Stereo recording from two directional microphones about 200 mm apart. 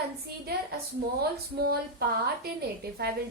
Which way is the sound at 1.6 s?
50° right (ahead or behind).